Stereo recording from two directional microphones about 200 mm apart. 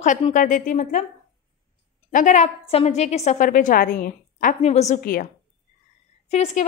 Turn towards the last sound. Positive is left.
turn(degrees=35)  # may be behind; listen again after turning